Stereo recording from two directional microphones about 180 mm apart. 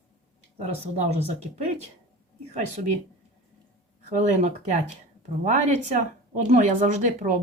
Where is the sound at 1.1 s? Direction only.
35° right (ahead or behind).